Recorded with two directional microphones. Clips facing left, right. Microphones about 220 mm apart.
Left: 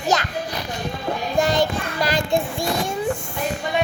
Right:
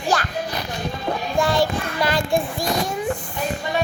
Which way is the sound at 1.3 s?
20° left (ahead or behind).